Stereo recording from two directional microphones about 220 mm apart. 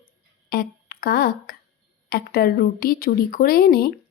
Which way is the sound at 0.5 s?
45° left (ahead or behind).